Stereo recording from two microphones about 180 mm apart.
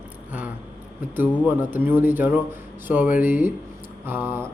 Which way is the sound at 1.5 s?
10° right (ahead or behind).